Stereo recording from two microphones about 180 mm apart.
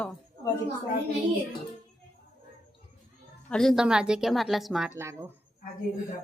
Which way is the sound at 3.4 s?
5° left (ahead or behind).